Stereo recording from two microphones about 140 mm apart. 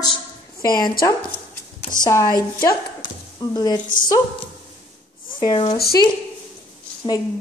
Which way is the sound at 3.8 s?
75° left (ahead or behind).